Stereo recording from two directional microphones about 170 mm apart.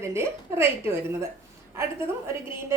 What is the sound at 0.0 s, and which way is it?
Speech, 15° right (ahead or behind).